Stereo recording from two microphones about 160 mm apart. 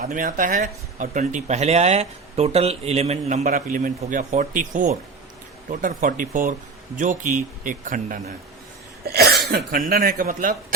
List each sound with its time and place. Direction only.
0.0 s speech: 55° right (ahead or behind)
3.4 s speech: 60° right (ahead or behind)
9.7 s speech: 60° right (ahead or behind)